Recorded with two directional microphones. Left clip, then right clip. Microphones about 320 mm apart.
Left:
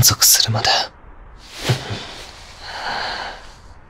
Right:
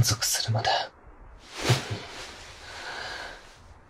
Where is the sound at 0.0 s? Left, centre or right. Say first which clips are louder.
Left 13 dB; left.